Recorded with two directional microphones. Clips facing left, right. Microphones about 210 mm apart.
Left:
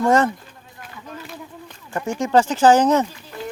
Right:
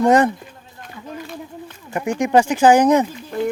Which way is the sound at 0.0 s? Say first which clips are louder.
Right 3 dB; 15° right (ahead or behind).